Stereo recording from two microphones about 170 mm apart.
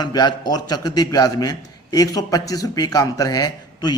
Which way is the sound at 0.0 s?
25° left (ahead or behind).